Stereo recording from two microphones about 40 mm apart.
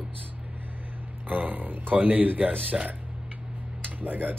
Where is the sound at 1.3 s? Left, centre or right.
Right.